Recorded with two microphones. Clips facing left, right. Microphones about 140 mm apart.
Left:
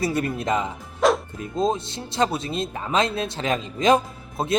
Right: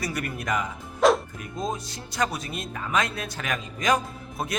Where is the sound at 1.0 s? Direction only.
Centre (ahead or behind).